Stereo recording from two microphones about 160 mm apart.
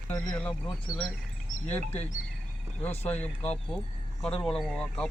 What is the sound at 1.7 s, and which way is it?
Clip-clop, 10° left (ahead or behind).